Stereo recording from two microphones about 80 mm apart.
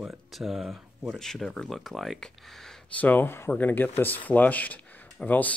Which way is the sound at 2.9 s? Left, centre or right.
Left.